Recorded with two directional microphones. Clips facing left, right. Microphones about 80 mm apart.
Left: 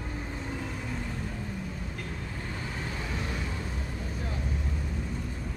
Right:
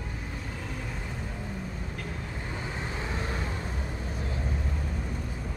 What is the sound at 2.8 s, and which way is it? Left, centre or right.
Vehicle, right.